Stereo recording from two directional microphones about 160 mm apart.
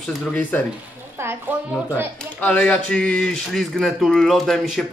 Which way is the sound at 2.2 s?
5° left (ahead or behind).